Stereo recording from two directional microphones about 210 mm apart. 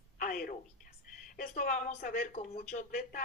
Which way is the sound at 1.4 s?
40° left (ahead or behind).